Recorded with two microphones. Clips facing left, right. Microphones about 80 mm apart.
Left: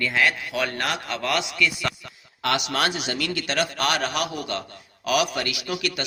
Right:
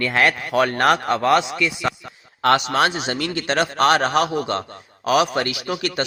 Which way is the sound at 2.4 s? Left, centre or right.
Right.